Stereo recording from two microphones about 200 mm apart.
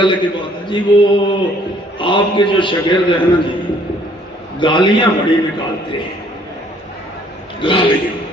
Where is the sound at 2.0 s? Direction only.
25° left (ahead or behind).